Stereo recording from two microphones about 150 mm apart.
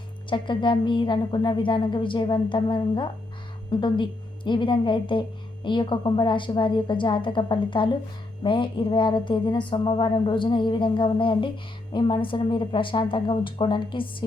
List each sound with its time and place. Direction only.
0.3 s speech: 35° left (ahead or behind)